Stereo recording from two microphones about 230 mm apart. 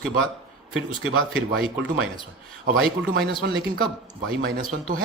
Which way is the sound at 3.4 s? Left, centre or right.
Right.